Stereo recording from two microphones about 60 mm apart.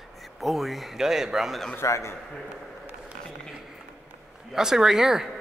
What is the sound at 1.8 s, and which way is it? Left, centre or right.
Speech, left.